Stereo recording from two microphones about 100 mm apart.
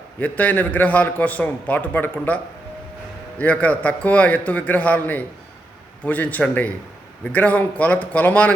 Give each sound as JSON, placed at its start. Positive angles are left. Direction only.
{"t": 0.2, "sound": "a man's voice", "side_deg": 15}